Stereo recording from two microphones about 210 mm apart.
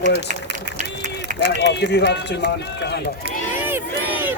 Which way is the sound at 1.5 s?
55° left (ahead or behind).